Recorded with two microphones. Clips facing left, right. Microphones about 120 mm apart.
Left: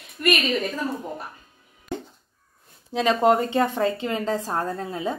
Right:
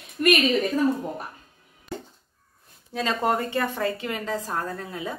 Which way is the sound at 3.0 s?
20° left (ahead or behind).